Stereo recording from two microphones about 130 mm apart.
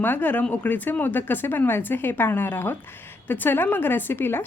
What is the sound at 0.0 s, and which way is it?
A woman's voice, 15° left (ahead or behind).